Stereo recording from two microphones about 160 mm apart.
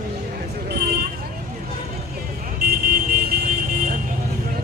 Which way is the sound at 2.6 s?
70° right (ahead or behind).